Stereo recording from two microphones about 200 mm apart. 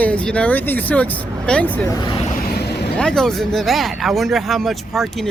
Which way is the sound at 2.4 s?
45° left (ahead or behind).